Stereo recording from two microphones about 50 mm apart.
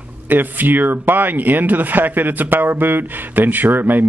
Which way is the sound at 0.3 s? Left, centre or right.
Right.